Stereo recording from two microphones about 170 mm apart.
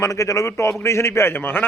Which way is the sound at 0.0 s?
20° left (ahead or behind).